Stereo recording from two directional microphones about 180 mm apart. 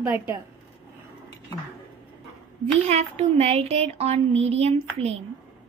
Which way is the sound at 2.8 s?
35° right (ahead or behind).